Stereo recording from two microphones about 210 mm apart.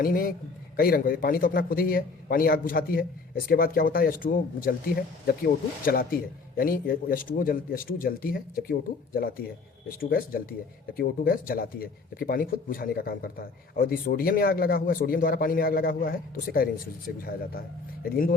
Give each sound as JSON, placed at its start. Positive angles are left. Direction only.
{"t": 0.0, "sound": "a man's voice", "side_deg": 45}